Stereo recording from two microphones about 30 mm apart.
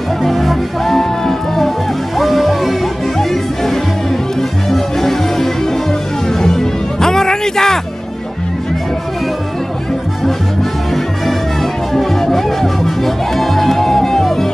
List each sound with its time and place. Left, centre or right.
0.2 s music: centre
3.2 s music: centre
11.9 s music: centre